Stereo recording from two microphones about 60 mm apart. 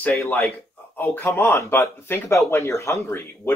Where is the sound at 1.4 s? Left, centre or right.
Left.